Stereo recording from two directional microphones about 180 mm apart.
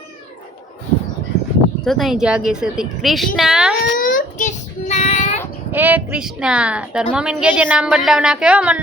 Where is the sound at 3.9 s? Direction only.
50° left (ahead or behind).